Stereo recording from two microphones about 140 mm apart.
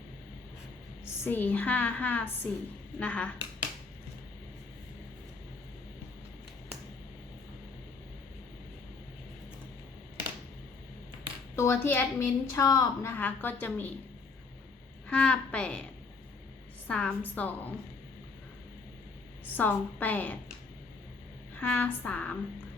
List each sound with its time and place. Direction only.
1.2 s a woman's voice: 15° left (ahead or behind)
11.5 s a woman's voice: 20° left (ahead or behind)
15.0 s a woman's voice: 10° left (ahead or behind)
16.9 s a woman's voice: 10° left (ahead or behind)
19.5 s a woman's voice: 10° left (ahead or behind)
21.5 s a woman's voice: 10° left (ahead or behind)